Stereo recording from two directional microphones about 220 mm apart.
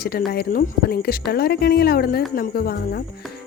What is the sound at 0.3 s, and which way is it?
Speech, 45° left (ahead or behind).